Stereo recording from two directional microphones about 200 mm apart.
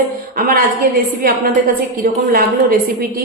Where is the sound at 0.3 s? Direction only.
45° right (ahead or behind).